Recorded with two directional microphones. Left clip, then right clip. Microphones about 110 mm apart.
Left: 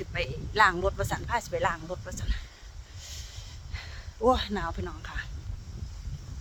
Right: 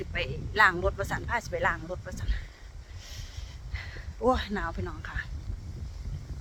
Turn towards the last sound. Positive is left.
turn(degrees=20)  # may be behind; listen again after turning